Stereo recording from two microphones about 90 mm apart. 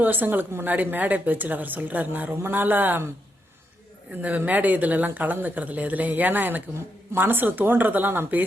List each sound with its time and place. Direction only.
0.0 s a woman's voice: 20° right (ahead or behind)
4.2 s a woman's voice: 15° right (ahead or behind)